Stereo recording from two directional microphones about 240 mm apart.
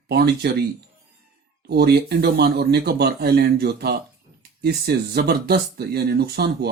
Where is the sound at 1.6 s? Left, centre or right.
Right.